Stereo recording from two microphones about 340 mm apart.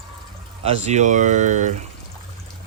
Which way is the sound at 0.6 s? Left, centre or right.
Centre.